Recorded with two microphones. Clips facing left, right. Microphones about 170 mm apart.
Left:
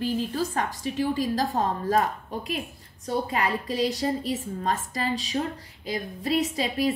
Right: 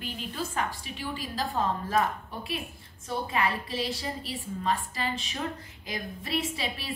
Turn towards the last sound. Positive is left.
turn(degrees=40)  # may be behind; listen again after turning